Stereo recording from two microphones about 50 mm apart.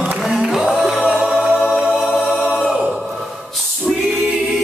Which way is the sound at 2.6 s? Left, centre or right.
Centre.